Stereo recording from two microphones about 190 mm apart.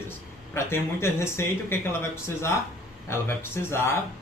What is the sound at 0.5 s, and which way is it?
Speech, 15° left (ahead or behind).